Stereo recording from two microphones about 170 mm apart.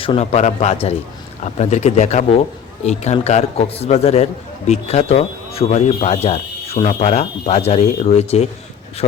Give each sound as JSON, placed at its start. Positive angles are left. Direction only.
{"t": 0.0, "sound": "a man's voice", "side_deg": 35}